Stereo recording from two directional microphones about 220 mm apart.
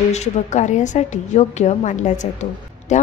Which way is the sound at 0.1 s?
30° left (ahead or behind).